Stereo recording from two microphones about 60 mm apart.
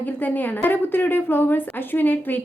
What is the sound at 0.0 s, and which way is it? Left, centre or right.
A woman's voice, left.